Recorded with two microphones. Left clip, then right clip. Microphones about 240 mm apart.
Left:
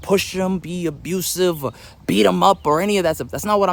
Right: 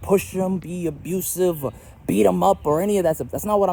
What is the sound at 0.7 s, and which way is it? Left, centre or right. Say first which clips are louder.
Speech: left 2 dB; centre.